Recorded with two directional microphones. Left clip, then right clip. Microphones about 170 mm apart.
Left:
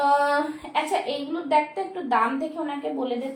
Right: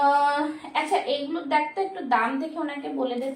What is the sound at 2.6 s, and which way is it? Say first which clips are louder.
Speech: left 1 dB; 20° left (ahead or behind).